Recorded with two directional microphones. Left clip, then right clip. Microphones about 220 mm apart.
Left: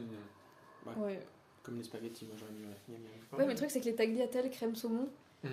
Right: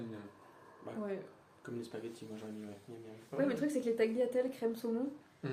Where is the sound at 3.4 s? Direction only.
45° left (ahead or behind).